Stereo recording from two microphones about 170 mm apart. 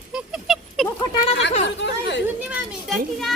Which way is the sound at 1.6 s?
90° left.